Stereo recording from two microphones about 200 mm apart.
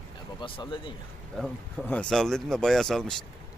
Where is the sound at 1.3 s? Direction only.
5° left (ahead or behind).